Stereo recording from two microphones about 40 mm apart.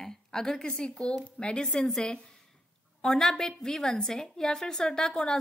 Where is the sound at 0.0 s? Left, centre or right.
Centre.